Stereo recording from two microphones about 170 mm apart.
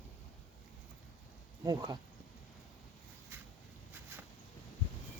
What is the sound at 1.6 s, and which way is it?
Speech, 20° right (ahead or behind).